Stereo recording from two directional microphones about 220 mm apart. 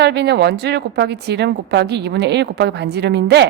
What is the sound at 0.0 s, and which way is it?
A woman's voice, 50° right (ahead or behind).